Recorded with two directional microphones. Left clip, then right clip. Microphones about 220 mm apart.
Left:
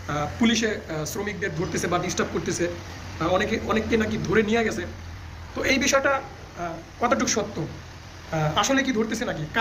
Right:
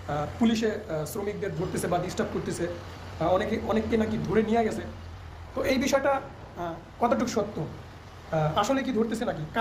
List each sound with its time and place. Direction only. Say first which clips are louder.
0.1 s speech: left 4 dB; 10° right (ahead or behind)